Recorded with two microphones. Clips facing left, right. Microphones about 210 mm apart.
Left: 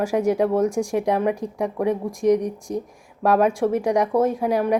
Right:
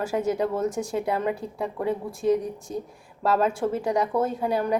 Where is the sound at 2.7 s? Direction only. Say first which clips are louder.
Left 4 dB; 70° left (ahead or behind).